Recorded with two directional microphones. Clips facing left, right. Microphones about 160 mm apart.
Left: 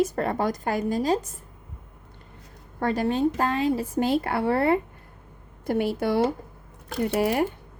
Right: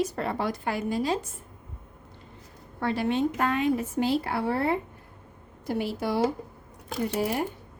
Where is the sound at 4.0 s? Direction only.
55° left (ahead or behind); by 7.4 s 70° left (ahead or behind).